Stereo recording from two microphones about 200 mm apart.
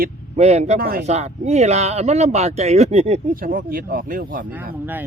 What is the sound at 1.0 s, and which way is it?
Speech, 35° right (ahead or behind).